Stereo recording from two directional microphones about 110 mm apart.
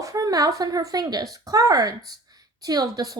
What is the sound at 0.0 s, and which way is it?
A woman's voice, 30° right (ahead or behind).